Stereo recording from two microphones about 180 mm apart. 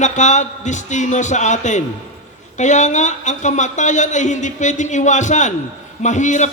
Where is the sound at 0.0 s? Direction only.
40° left (ahead or behind).